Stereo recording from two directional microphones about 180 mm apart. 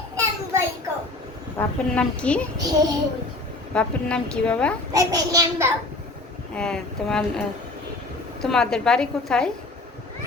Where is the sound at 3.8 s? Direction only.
5° left (ahead or behind).